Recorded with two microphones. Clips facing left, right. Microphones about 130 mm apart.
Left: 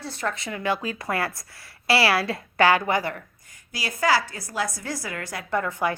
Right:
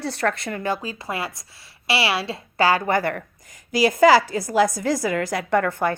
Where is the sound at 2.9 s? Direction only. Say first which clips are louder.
Right 3 dB; 60° right (ahead or behind).